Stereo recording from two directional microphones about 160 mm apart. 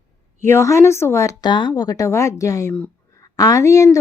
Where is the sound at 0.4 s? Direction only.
15° left (ahead or behind).